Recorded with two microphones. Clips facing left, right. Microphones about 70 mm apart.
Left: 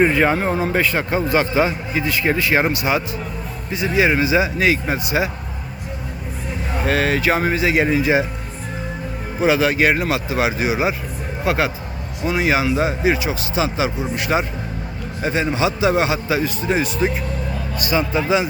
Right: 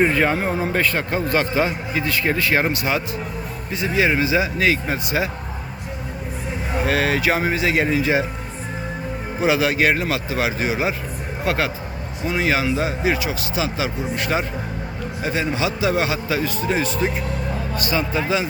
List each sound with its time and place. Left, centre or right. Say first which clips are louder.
0.0 s a man's voice: left 2 dB; centre
6.7 s speech: left 1 dB; centre
7.7 s a man's voice: left 3 dB; centre
9.4 s speech: left 2 dB; centre
9.9 s a man's voice: left 2 dB; centre
12.7 s a man's voice: left 3 dB; left; by 18.0 s centre
18.1 s a man's voice: left 3 dB; centre